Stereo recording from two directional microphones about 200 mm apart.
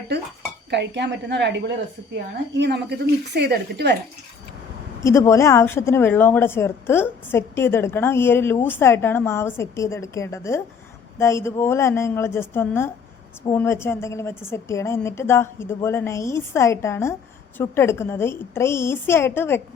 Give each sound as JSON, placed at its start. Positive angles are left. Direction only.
{"t": 0.1, "sound": "a woman's voice", "side_deg": -55}
{"t": 5.0, "sound": "a woman's voice", "side_deg": 15}